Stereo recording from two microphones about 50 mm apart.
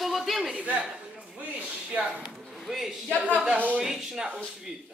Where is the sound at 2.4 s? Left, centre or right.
Centre.